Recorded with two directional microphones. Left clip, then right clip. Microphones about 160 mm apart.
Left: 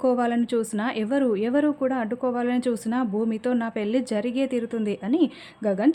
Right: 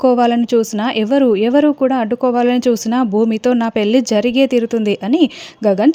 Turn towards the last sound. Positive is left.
turn(degrees=-50)  # may be behind; listen again after turning